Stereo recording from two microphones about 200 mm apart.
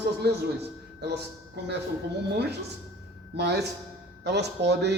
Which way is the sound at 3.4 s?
55° right (ahead or behind).